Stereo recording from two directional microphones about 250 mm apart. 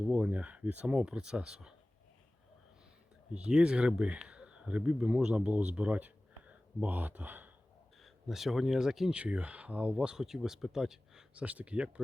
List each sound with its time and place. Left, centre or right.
0.1 s speech: centre
3.3 s speech: centre